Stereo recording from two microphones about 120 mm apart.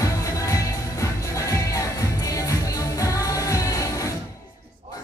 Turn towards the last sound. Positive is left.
turn(degrees=25)  # may be behind; listen again after turning